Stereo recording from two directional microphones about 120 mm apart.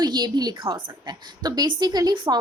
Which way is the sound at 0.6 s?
45° right (ahead or behind).